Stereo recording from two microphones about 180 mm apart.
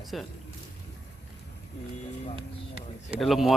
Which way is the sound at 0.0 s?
Centre (ahead or behind).